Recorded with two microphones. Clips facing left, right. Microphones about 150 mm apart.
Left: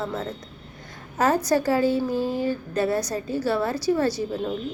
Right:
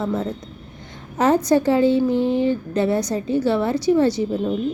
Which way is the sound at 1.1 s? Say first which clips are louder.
Right 4 dB; 20° right (ahead or behind).